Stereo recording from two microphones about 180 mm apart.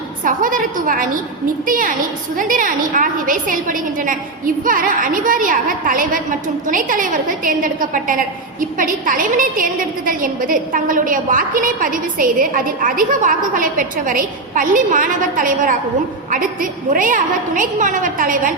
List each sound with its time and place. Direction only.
0.3 s a woman's voice: 50° right (ahead or behind)